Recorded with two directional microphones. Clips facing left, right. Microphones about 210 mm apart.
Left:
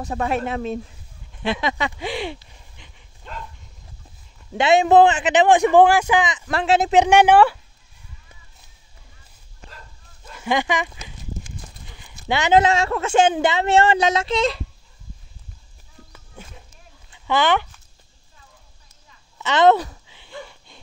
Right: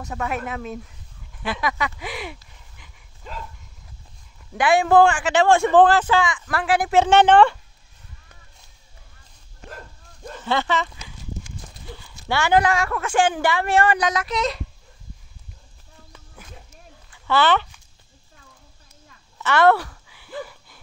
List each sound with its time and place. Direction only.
0.0 s speech: 30° left (ahead or behind)
3.3 s dog: centre (ahead or behind)
4.6 s a man's voice: 20° left (ahead or behind)
10.3 s a man's voice: 10° left (ahead or behind); by 14.6 s 30° left (ahead or behind)
16.4 s a sound: 25° left (ahead or behind)
17.1 s a child's voice: 15° left (ahead or behind)
19.4 s a sound: 20° left (ahead or behind)